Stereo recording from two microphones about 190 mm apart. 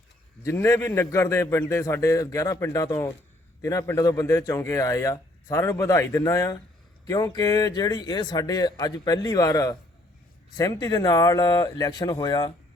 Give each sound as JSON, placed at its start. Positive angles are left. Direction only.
{"t": 0.4, "sound": "a man's voice", "side_deg": 15}